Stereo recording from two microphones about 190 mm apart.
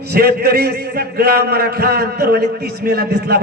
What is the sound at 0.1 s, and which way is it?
A man's voice, 55° right (ahead or behind).